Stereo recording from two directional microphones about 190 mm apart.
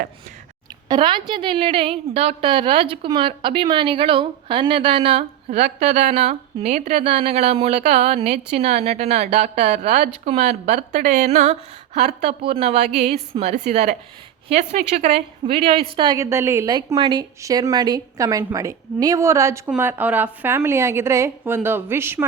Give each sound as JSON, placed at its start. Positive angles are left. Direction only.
{"t": 0.9, "sound": "a woman's voice", "side_deg": -25}
{"t": 16.0, "sound": "a woman's voice", "side_deg": -20}